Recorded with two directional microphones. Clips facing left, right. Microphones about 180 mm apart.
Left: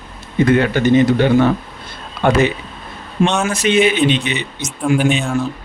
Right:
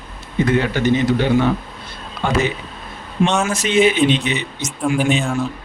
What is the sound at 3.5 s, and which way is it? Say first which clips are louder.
Speech: left 2 dB; 65° left (ahead or behind).